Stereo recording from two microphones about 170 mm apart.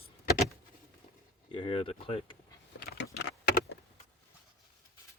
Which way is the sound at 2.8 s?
70° left (ahead or behind).